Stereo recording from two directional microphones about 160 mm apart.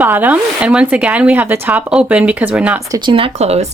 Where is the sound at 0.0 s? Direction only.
10° right (ahead or behind).